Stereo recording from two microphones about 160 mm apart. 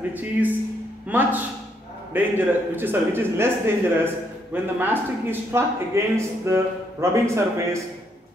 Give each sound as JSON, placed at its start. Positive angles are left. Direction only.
{"t": 0.1, "sound": "speech", "side_deg": -10}